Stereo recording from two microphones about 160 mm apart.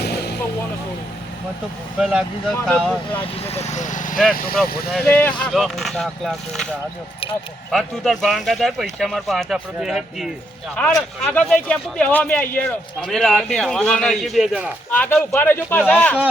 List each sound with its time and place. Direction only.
2.0 s speech: centre (ahead or behind)
2.6 s a man's voice: 10° left (ahead or behind)
3.4 s speech: 40° left (ahead or behind)
4.4 s speech: 70° left (ahead or behind)
4.9 s speech: centre (ahead or behind)
7.7 s speech: centre (ahead or behind)
14.8 s a man's voice: 10° left (ahead or behind)